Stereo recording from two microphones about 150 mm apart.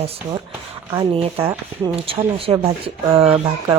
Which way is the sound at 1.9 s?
40° right (ahead or behind).